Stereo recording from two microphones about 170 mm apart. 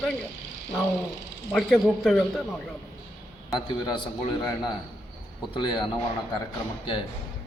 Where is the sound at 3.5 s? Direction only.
20° left (ahead or behind).